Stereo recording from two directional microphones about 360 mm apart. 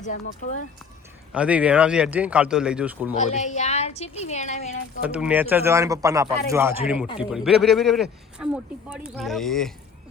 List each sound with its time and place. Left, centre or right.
0.0 s a woman's voice: centre
1.3 s speech: centre
3.2 s a woman's voice: centre
5.0 s speech: centre